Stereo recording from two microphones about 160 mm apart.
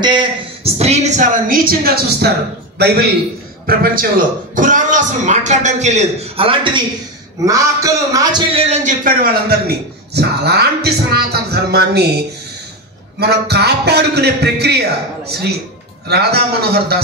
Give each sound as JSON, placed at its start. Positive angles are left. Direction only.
{"t": 0.0, "sound": "a man's voice", "side_deg": -30}
{"t": 0.7, "sound": "a woman's voice", "side_deg": -45}
{"t": 3.6, "sound": "speech", "side_deg": -65}
{"t": 7.4, "sound": "a man's voice", "side_deg": -20}
{"t": 8.5, "sound": "speech", "side_deg": -40}
{"t": 9.0, "sound": "a woman's voice", "side_deg": -65}
{"t": 10.1, "sound": "a man's voice", "side_deg": -90}